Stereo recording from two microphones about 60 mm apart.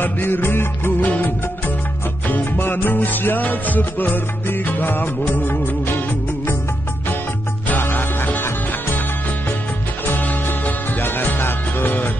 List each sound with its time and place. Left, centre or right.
0.0 s music: left
1.0 s music of bollywood: left
2.2 s music: left
7.6 s music: left
10.0 s music: left